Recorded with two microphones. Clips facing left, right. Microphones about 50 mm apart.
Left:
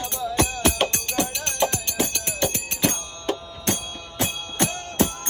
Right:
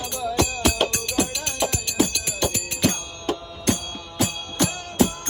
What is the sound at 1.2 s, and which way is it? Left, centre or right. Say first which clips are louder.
Music: left 1 dB; left.